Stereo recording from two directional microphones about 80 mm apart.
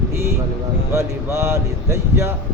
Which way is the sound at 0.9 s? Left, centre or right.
Right.